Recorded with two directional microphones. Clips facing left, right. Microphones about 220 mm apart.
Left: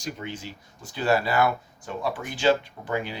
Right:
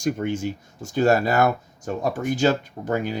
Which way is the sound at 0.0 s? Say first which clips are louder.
Right 10 dB; 50° right (ahead or behind).